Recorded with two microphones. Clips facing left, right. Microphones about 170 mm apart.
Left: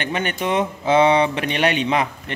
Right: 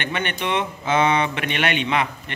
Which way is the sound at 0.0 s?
40° left (ahead or behind).